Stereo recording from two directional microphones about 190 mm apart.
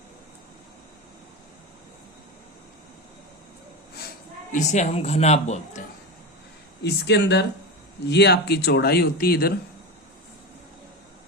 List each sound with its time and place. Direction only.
4.5 s a man's voice: 40° left (ahead or behind)
6.8 s speech: 60° left (ahead or behind)